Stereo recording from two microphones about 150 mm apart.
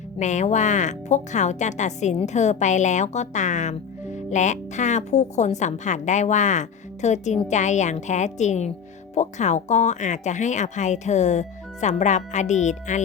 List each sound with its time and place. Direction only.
0.2 s speech: 55° left (ahead or behind)